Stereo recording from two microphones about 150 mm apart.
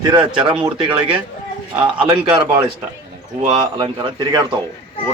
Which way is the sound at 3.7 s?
30° right (ahead or behind).